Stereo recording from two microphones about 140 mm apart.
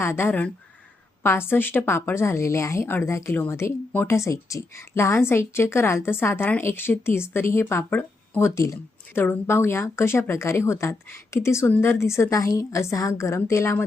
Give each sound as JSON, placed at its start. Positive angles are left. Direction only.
{"t": 0.0, "sound": "a woman's voice", "side_deg": 20}